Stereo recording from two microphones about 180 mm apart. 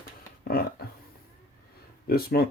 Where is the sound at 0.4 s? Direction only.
55° left (ahead or behind).